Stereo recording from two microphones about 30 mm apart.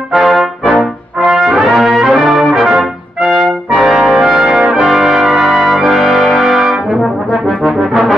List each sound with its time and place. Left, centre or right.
0.1 s brass instrument: centre
3.8 s brass instrument: centre
4.8 s brass instrument: centre
5.8 s music: centre
6.3 s brass instrument: centre
7.9 s brass instrument: centre